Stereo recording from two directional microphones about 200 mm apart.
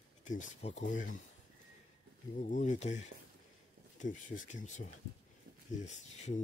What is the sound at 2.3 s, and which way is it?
Speech, 40° left (ahead or behind).